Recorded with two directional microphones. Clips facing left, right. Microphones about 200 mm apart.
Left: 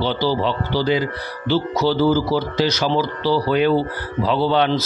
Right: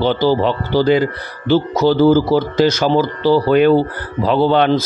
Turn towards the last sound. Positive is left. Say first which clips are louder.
# right 5 dB
turn(degrees=-55)  # may be behind; listen again after turning